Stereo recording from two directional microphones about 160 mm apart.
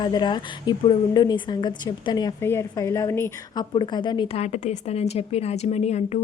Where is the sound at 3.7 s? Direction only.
30° left (ahead or behind).